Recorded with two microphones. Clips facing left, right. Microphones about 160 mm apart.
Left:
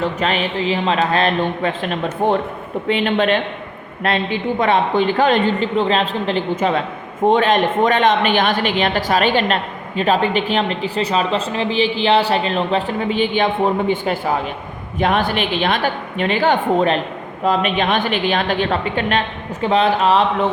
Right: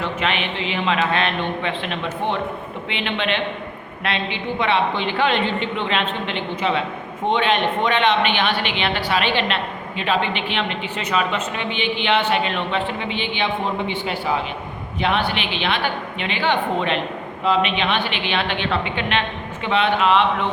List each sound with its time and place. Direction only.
0.0 s a woman's voice: 40° left (ahead or behind)